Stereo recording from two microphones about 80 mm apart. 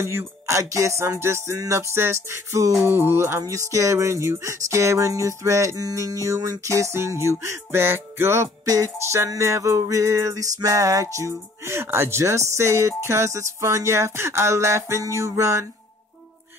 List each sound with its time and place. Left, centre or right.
0.0 s music: right